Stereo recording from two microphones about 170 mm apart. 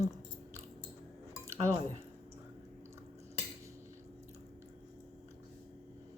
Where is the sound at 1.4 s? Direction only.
15° right (ahead or behind).